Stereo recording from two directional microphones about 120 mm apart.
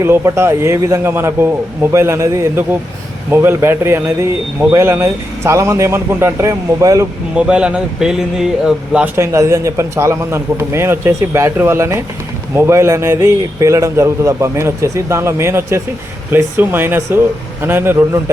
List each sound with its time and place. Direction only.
0.0 s a man's voice: 20° right (ahead or behind)
7.3 s speech: 10° right (ahead or behind)
9.1 s a man's voice: 25° right (ahead or behind)